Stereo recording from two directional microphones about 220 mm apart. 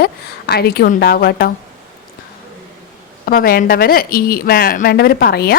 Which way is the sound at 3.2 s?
40° left (ahead or behind).